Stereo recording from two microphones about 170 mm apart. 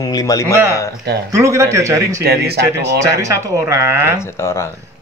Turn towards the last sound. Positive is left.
turn(degrees=15)  # may be behind; listen again after turning